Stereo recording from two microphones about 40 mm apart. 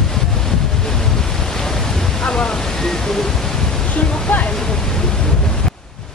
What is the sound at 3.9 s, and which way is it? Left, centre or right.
Waterfall, left.